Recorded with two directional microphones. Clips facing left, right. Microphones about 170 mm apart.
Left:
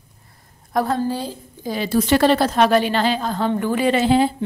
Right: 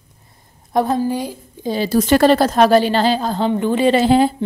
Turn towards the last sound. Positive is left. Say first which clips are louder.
# right 3 dB
turn(degrees=-40)  # may be behind; listen again after turning